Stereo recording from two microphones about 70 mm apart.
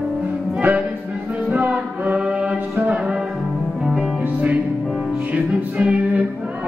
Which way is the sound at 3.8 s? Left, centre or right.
Centre.